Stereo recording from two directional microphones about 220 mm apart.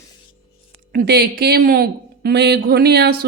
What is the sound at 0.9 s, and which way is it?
Speech, 45° right (ahead or behind).